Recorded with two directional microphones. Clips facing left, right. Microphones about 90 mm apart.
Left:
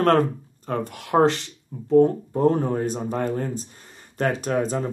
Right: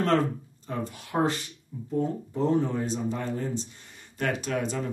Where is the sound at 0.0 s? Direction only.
55° left (ahead or behind).